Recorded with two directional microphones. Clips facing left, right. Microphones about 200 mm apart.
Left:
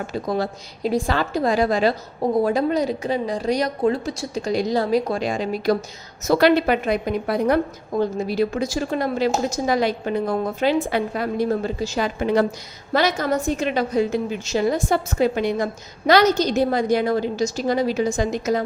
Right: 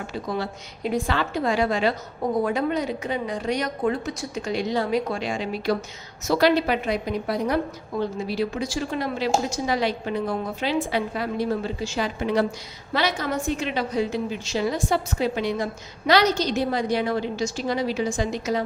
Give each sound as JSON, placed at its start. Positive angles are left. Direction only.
{"t": 0.1, "sound": "speech", "side_deg": 40}
{"t": 6.2, "sound": "a woman's voice", "side_deg": 55}